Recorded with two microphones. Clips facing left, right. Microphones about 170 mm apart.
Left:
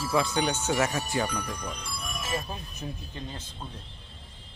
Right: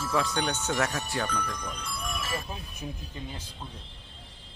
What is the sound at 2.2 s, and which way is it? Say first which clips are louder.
Music: left 4 dB; 20° left (ahead or behind).